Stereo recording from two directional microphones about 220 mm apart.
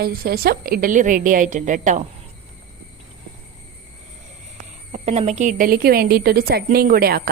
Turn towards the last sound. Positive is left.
turn(degrees=-45)  # may be behind; listen again after turning